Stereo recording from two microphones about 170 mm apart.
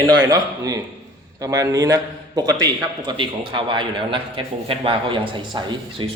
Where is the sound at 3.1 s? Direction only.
30° right (ahead or behind).